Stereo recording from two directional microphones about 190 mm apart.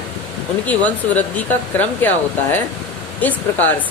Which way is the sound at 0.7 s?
10° left (ahead or behind).